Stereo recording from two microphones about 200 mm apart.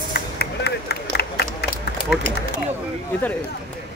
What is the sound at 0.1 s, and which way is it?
Run, 55° left (ahead or behind).